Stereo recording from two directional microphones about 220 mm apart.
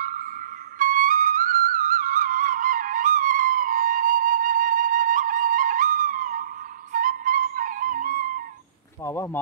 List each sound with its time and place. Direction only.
0.7 s music: 35° right (ahead or behind)
6.9 s flute: 40° right (ahead or behind)
9.0 s speech: 10° left (ahead or behind)